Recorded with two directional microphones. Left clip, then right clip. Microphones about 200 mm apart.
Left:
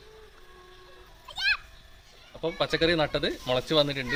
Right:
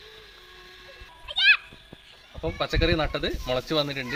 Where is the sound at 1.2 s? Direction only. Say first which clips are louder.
Right 8 dB; 75° left (ahead or behind).